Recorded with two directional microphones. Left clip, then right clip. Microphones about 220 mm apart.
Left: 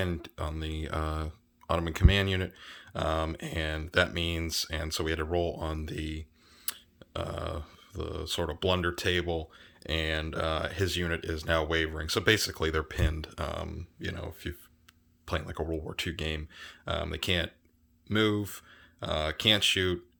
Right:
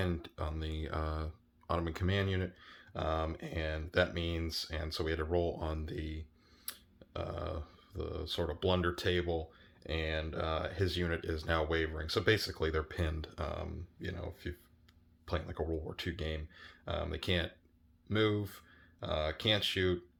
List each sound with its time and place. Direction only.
0.0 s speech: 25° left (ahead or behind)